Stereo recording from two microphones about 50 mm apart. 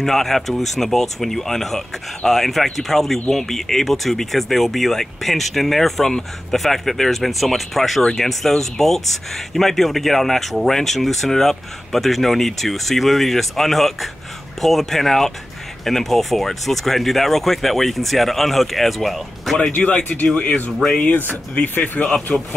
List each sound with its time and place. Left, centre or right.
0.0 s speech: centre
8.0 s speech: centre
19.7 s speech: left
22.0 s speech: centre